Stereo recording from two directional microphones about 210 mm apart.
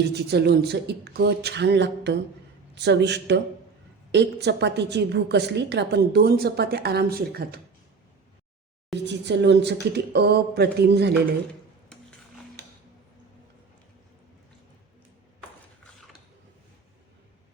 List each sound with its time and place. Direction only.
0.1 s a woman's voice: 50° right (ahead or behind)
9.0 s a woman's voice: 55° right (ahead or behind)